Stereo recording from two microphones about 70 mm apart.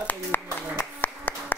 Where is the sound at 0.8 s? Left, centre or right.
Left.